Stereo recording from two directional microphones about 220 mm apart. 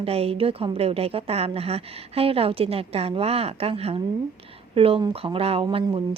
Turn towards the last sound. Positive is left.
turn(degrees=-20)  # may be behind; listen again after turning